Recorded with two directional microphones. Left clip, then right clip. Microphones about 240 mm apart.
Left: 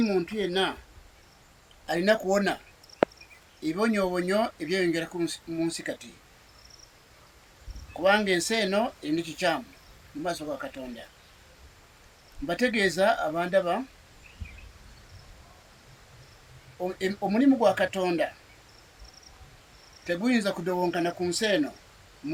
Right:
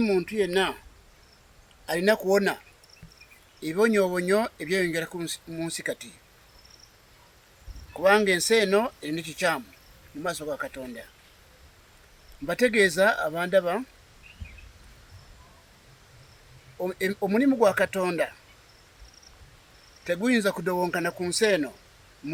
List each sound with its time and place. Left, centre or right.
0.0 s speech: right
1.9 s speech: right
3.6 s speech: right
8.0 s speech: right
12.5 s speech: right
16.8 s speech: right
20.1 s speech: right